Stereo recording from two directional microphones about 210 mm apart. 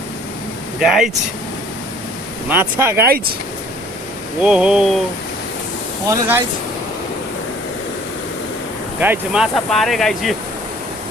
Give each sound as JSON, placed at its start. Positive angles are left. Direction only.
{"t": 0.8, "sound": "speech", "side_deg": 0}
{"t": 2.5, "sound": "speech", "side_deg": -10}
{"t": 4.4, "sound": "speech", "side_deg": -5}
{"t": 6.1, "sound": "speech", "side_deg": -10}
{"t": 9.0, "sound": "speech", "side_deg": -5}